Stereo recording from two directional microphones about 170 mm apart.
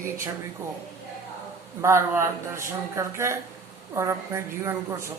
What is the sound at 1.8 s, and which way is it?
A woman's voice, 15° right (ahead or behind).